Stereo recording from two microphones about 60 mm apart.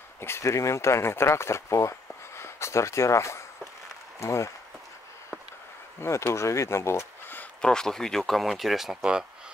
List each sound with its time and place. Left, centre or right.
0.2 s speech: left
5.9 s speech: left
7.6 s speech: centre